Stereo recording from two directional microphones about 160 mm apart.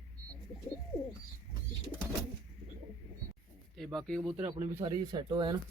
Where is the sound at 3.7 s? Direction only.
Centre (ahead or behind).